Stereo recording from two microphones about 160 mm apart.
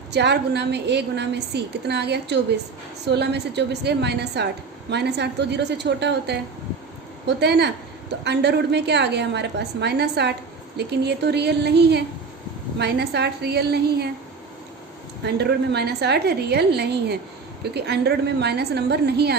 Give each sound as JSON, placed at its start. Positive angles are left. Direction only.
{"t": 0.1, "sound": "a woman's voice", "side_deg": -90}
{"t": 15.2, "sound": "a woman's voice", "side_deg": -90}